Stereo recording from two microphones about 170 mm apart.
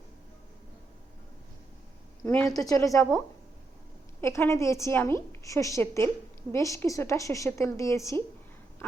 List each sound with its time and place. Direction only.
2.2 s a woman's voice: 15° left (ahead or behind)
4.2 s a woman's voice: 15° left (ahead or behind)